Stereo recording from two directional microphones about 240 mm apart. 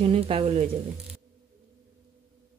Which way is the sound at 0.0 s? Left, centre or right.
Right.